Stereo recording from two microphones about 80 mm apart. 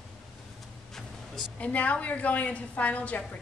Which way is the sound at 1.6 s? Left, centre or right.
Centre.